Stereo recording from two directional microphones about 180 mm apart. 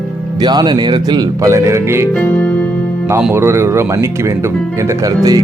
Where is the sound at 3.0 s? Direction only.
10° right (ahead or behind).